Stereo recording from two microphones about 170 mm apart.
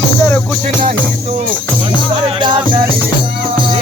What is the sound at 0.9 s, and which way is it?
Speech, 35° right (ahead or behind).